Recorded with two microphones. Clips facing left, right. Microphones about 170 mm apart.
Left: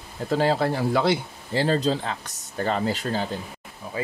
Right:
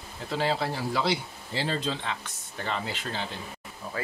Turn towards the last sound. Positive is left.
turn(degrees=40)  # may be behind; listen again after turning